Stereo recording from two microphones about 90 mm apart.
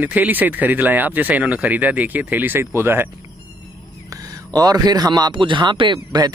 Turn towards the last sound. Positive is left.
turn(degrees=-50)  # may be behind; listen again after turning